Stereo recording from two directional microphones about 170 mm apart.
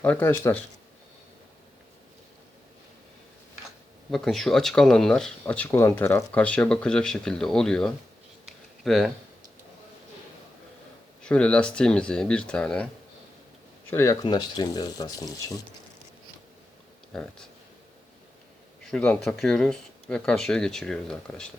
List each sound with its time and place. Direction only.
0.0 s speech: 10° left (ahead or behind)
4.1 s speech: centre (ahead or behind)
8.4 s a sound: centre (ahead or behind)
11.2 s speech: 5° left (ahead or behind)
13.9 s speech: 20° left (ahead or behind)
17.1 s speech: 5° left (ahead or behind)
18.9 s speech: 5° left (ahead or behind)